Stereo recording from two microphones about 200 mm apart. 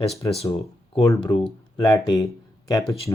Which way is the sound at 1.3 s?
5° left (ahead or behind).